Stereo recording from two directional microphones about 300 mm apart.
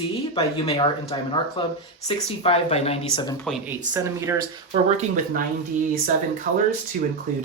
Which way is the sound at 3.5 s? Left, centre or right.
Centre.